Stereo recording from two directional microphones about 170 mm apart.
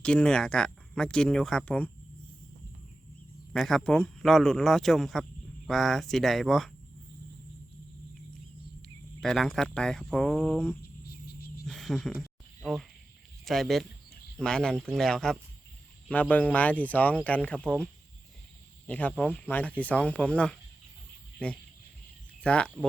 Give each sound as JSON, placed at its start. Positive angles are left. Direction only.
{"t": 0.0, "sound": "speech", "side_deg": 5}
{"t": 3.5, "sound": "speech", "side_deg": 0}
{"t": 9.2, "sound": "speech", "side_deg": 0}
{"t": 11.0, "sound": "cricket", "side_deg": 65}
{"t": 11.6, "sound": "speech", "side_deg": 0}
{"t": 13.4, "sound": "a man's voice", "side_deg": 0}
{"t": 18.9, "sound": "speech", "side_deg": 10}